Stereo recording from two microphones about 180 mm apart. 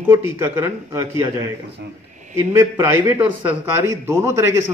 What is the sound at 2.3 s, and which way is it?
A man's voice, 15° right (ahead or behind).